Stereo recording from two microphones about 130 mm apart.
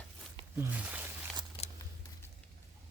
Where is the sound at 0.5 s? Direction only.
15° right (ahead or behind).